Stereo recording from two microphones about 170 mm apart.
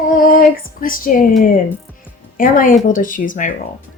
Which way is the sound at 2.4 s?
55° left (ahead or behind).